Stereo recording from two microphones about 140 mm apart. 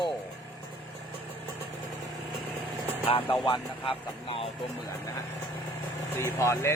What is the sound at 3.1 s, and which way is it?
A man's voice, 35° left (ahead or behind).